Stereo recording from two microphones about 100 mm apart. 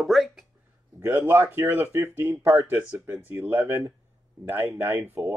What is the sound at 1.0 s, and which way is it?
Speech, 25° right (ahead or behind).